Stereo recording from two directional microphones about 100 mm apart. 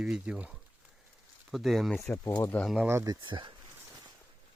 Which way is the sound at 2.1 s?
15° left (ahead or behind).